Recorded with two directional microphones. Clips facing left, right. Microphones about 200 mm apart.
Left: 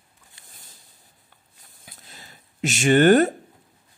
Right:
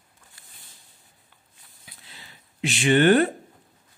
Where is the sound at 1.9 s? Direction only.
45° left (ahead or behind).